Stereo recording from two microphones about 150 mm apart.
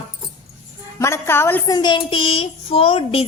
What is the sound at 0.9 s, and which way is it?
Speech, 20° left (ahead or behind).